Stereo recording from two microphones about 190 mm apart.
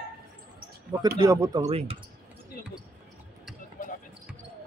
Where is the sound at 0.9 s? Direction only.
20° right (ahead or behind).